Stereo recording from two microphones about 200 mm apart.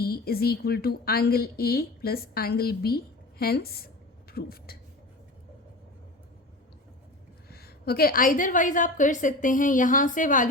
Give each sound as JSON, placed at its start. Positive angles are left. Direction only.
{"t": 0.0, "sound": "a woman's voice", "side_deg": 50}
{"t": 7.5, "sound": "a woman's voice", "side_deg": 50}